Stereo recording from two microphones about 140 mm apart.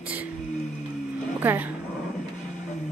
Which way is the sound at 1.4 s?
15° right (ahead or behind).